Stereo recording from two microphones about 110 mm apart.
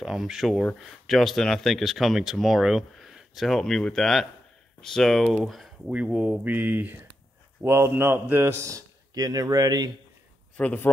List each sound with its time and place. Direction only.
0.0 s speech: 5° right (ahead or behind)
5.9 s a man's voice: 10° right (ahead or behind); by 9.8 s 35° right (ahead or behind)
10.6 s speech: 15° left (ahead or behind)